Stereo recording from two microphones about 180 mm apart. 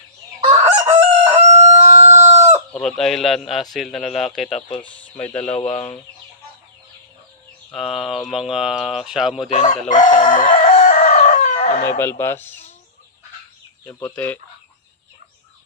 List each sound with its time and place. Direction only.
0.6 s chicken: 10° right (ahead or behind)
1.2 s crowing: 40° right (ahead or behind)
1.8 s chicken: 15° right (ahead or behind)
2.7 s speech: 5° left (ahead or behind)
5.5 s speech: 30° left (ahead or behind)
7.7 s speech: centre (ahead or behind)
9.5 s speech: 40° left (ahead or behind)
9.9 s chicken: 45° left (ahead or behind)
11.9 s speech: 15° left (ahead or behind)
13.8 s speech: 10° left (ahead or behind)